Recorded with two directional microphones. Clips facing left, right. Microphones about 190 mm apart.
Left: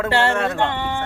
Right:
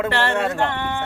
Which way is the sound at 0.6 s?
15° left (ahead or behind).